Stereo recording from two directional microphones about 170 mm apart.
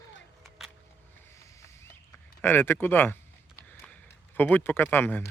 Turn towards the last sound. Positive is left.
turn(degrees=10)  # may be behind; listen again after turning